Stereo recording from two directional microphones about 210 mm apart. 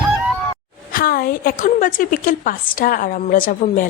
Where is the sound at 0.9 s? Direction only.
45° left (ahead or behind).